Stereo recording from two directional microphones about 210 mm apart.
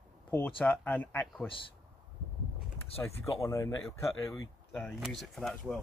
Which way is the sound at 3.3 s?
20° left (ahead or behind).